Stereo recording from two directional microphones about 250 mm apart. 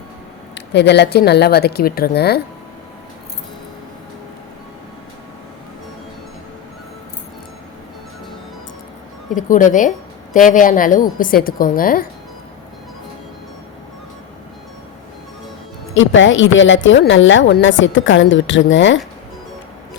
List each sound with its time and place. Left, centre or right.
0.5 s speech: left
9.3 s speech: left
16.0 s a woman's voice: left